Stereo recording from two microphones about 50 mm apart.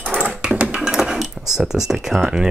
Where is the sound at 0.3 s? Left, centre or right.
Centre.